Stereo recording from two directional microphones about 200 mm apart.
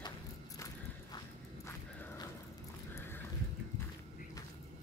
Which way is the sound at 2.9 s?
10° left (ahead or behind).